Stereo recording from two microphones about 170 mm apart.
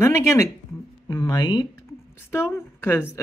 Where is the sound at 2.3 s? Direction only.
15° left (ahead or behind).